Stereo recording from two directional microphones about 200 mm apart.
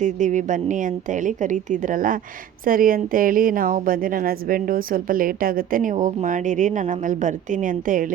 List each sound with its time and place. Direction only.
0.0 s a woman's voice: 40° right (ahead or behind)